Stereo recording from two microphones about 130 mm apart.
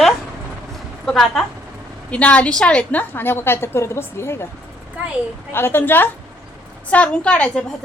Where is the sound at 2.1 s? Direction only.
10° left (ahead or behind).